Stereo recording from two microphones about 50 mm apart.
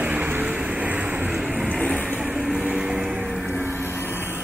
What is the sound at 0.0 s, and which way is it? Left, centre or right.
Vehicle, right.